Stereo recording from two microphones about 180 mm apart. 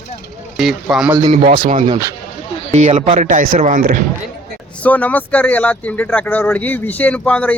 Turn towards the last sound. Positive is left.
turn(degrees=5)  # may be behind; listen again after turning